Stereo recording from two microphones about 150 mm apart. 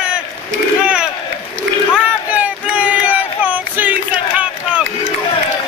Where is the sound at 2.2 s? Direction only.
10° right (ahead or behind).